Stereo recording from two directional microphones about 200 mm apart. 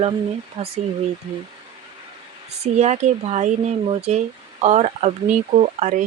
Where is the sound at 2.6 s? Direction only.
35° right (ahead or behind).